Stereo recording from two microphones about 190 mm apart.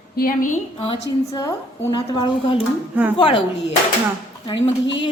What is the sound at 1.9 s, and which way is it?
Speech, 25° left (ahead or behind).